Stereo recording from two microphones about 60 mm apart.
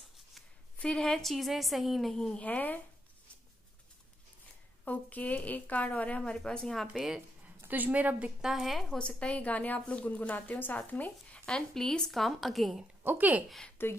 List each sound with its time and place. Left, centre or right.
0.7 s a woman's voice: centre
2.4 s speech: left
4.8 s speech: left; by 7.0 s centre
7.6 s a woman's voice: right
8.4 s speech: centre
8.9 s speech: centre
11.4 s speech: centre
13.0 s speech: right
13.8 s speech: left